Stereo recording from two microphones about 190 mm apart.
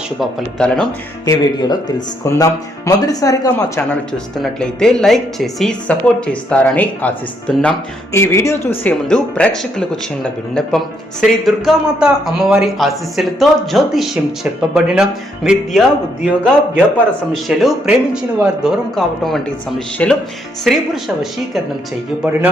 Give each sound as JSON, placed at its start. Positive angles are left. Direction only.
{"t": 0.2, "sound": "a man's voice", "side_deg": 0}
{"t": 1.2, "sound": "speech", "side_deg": 20}
{"t": 4.4, "sound": "a man's voice", "side_deg": 0}
{"t": 16.2, "sound": "a man's voice", "side_deg": 0}